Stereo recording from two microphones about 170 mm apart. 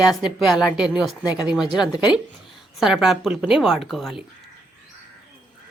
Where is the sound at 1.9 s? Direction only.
25° left (ahead or behind).